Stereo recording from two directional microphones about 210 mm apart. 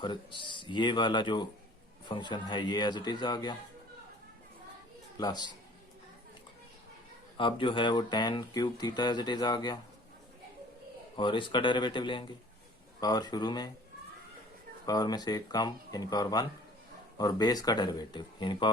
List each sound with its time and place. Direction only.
0.0 s speech: 20° left (ahead or behind)
5.1 s speech: 20° left (ahead or behind)
7.3 s speech: 25° left (ahead or behind)
11.2 s speech: 25° left (ahead or behind)
14.8 s speech: 20° left (ahead or behind)